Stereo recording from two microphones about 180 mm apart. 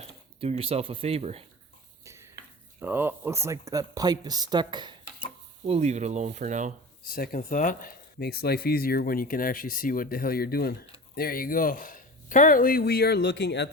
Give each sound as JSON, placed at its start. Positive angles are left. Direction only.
{"t": 0.0, "sound": "speech", "side_deg": -35}
{"t": 2.0, "sound": "a sound", "side_deg": -15}
{"t": 2.8, "sound": "speech", "side_deg": -10}
{"t": 5.6, "sound": "speech", "side_deg": -35}
{"t": 7.1, "sound": "speech", "side_deg": 55}